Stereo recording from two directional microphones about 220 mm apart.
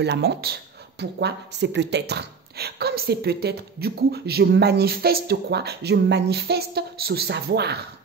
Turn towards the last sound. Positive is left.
turn(degrees=-45)  # may be behind; listen again after turning